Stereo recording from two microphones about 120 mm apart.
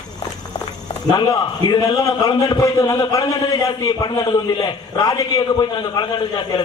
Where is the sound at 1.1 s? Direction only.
35° left (ahead or behind).